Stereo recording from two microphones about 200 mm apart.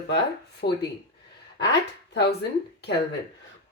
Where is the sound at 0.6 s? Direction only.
50° left (ahead or behind).